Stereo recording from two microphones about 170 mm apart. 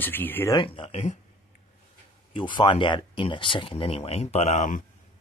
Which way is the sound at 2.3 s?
30° left (ahead or behind).